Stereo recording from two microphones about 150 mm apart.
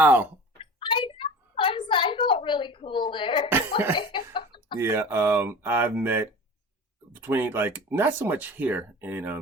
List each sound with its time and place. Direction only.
0.0 s speech: 10° right (ahead or behind)
0.6 s a sound: 35° left (ahead or behind)
4.8 s speech: 15° right (ahead or behind)